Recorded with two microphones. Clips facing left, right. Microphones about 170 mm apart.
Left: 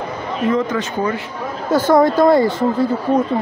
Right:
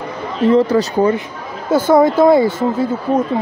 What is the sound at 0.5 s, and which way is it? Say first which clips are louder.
Speech: right 7 dB; 35° right (ahead or behind).